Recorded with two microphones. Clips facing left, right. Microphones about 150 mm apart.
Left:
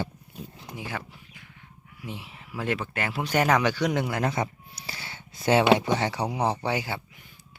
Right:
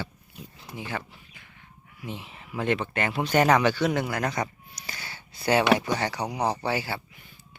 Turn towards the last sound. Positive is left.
turn(degrees=20)  # may be behind; listen again after turning